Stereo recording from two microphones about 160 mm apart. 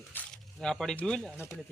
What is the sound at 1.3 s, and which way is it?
Speech, 15° left (ahead or behind).